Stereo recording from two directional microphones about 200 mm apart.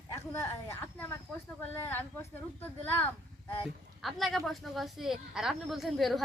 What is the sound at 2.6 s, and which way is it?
Speech, 10° left (ahead or behind).